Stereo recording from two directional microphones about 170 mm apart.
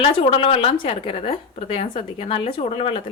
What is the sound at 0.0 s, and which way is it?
A woman's voice, 35° left (ahead or behind).